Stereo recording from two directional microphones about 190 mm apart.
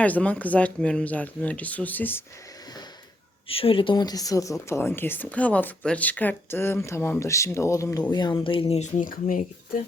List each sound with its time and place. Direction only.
0.0 s speech: 5° left (ahead or behind)
3.5 s speech: 30° left (ahead or behind)